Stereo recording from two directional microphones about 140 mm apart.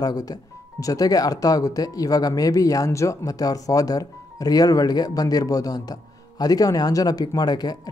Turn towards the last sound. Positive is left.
turn(degrees=30)  # may be behind; listen again after turning